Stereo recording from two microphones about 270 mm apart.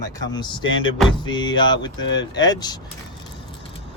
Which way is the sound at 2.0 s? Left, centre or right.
Left.